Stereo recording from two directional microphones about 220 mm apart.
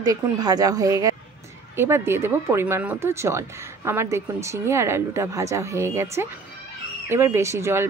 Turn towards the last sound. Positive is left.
turn(degrees=-10)  # may be behind; listen again after turning